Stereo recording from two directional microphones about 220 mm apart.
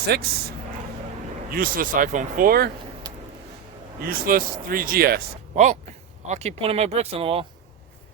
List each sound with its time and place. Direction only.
0.0 s speech: 45° right (ahead or behind)
4.0 s speech: 40° right (ahead or behind); by 7.4 s 25° right (ahead or behind)